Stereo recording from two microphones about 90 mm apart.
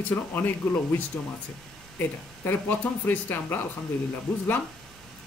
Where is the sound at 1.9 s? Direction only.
20° left (ahead or behind).